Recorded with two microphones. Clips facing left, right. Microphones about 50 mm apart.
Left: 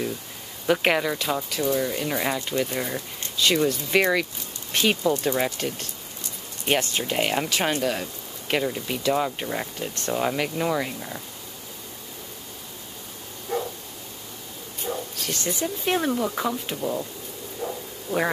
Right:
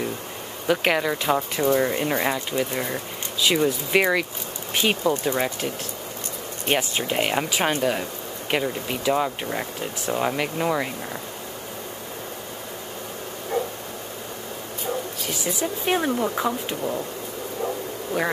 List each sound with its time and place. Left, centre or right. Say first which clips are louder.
0.7 s speech: even; centre
1.1 s speech: right 4 dB; right
13.5 s dog: right 2 dB; right
15.1 s speech: right 1 dB; centre
16.6 s speech: right 1 dB; centre
18.1 s speech: left 1 dB; right